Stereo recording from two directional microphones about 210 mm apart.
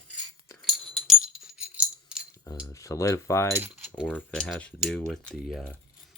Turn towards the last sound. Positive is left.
turn(degrees=0)  # may be behind; listen again after turning